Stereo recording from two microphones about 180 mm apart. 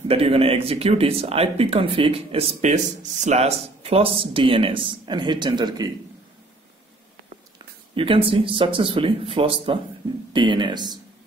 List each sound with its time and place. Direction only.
0.1 s speech: 30° right (ahead or behind)
7.9 s speech: 30° right (ahead or behind)